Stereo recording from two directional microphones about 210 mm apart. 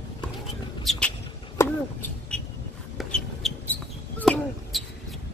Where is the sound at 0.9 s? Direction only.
5° left (ahead or behind).